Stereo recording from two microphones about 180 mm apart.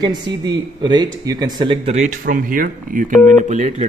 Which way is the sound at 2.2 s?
50° right (ahead or behind).